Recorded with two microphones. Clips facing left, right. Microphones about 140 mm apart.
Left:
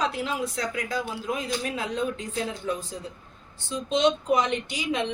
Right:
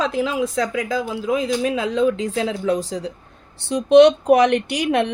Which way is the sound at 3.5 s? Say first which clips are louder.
Right 16 dB; 70° right (ahead or behind).